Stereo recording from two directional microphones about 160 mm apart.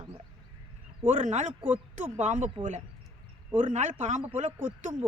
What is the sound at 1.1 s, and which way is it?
Speech, 50° right (ahead or behind).